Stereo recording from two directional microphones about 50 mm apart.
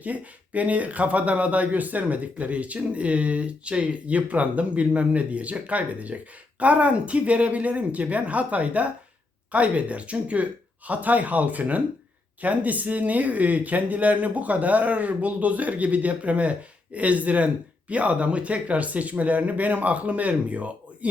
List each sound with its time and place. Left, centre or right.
0.0 s speech: right